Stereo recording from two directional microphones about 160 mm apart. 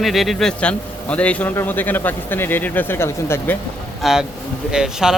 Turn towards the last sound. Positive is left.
turn(degrees=-5)  # may be behind; listen again after turning